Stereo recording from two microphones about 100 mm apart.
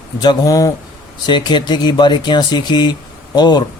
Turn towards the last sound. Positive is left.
turn(degrees=45)  # may be behind; listen again after turning